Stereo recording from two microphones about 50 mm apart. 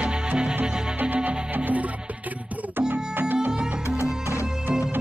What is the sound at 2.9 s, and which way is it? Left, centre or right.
Music, right.